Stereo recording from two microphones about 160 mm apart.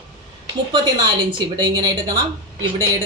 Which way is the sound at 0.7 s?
30° right (ahead or behind).